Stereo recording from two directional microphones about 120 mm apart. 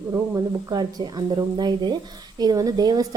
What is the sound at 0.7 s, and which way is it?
A woman's voice, 35° right (ahead or behind).